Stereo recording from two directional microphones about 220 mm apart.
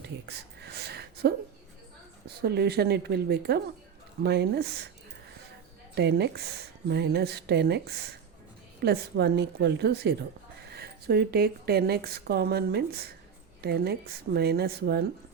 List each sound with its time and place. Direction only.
0.3 s a sound: 50° right (ahead or behind)
2.2 s speech: 45° right (ahead or behind)
5.9 s speech: 50° right (ahead or behind)